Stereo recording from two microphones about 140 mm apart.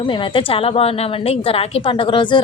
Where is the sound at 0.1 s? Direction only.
40° left (ahead or behind).